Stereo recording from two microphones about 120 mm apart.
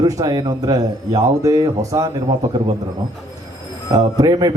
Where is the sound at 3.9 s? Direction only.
30° right (ahead or behind).